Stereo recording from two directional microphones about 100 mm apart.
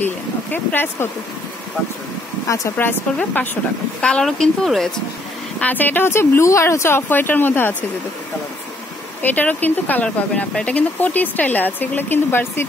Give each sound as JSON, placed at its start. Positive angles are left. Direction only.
{"t": 0.0, "sound": "speech", "side_deg": 20}
{"t": 2.4, "sound": "speech", "side_deg": 35}
{"t": 4.0, "sound": "speech", "side_deg": 5}
{"t": 5.6, "sound": "speech", "side_deg": 15}
{"t": 9.2, "sound": "speech", "side_deg": 15}